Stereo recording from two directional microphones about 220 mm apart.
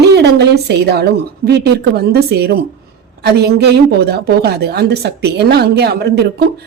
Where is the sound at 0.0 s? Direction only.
50° right (ahead or behind).